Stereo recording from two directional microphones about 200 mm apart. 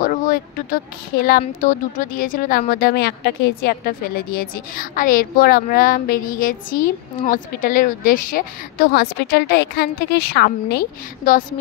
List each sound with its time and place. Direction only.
0.0 s a woman's voice: 45° left (ahead or behind)